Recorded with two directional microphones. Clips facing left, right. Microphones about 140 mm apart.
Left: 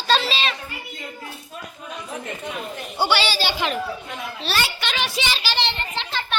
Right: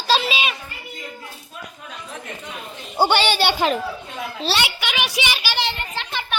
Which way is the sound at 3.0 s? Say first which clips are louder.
Right 4 dB; 55° right (ahead or behind).